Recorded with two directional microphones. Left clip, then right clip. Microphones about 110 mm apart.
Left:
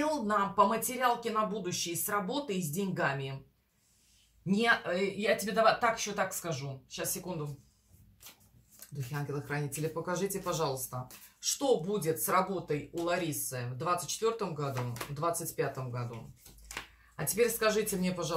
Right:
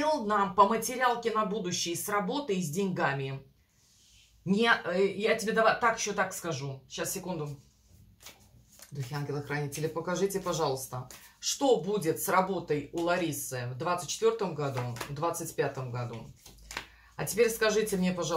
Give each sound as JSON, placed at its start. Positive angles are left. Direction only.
{"t": 0.0, "sound": "speech", "side_deg": -25}
{"t": 4.5, "sound": "speech", "side_deg": -30}
{"t": 9.3, "sound": "speech", "side_deg": -35}
{"t": 17.2, "sound": "speech", "side_deg": -45}